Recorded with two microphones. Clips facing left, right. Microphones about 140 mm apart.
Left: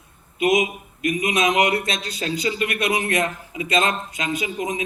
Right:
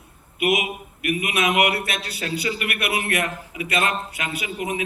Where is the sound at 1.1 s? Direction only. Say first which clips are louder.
Left 1 dB; 20° left (ahead or behind).